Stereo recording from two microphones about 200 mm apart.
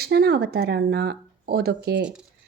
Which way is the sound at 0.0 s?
55° right (ahead or behind).